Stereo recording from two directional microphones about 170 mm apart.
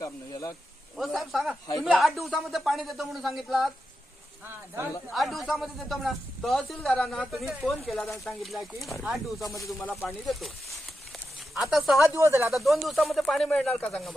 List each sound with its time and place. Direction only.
0.0 s snake: 20° left (ahead or behind)
0.9 s a sound: centre (ahead or behind)
1.8 s speech: centre (ahead or behind)
4.4 s speech: 15° right (ahead or behind)
5.1 s speech: centre (ahead or behind)
12.2 s speech: 15° right (ahead or behind)
12.5 s speech: centre (ahead or behind)